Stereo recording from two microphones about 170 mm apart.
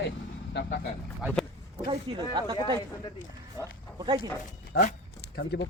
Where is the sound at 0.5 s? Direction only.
80° left.